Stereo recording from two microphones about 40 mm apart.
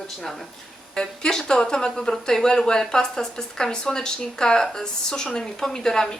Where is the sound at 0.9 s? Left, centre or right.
Centre.